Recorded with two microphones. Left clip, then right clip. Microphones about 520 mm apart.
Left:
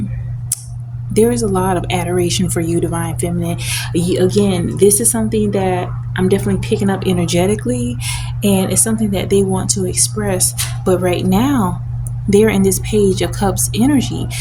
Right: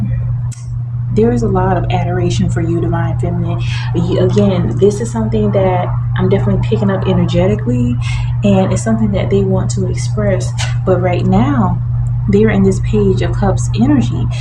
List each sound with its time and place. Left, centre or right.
1.1 s speech: left